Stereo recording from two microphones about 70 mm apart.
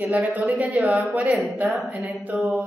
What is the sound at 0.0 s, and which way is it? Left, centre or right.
A woman's voice, right.